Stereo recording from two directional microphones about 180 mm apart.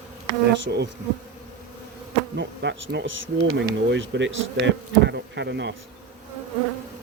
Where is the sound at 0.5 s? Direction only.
75° right (ahead or behind).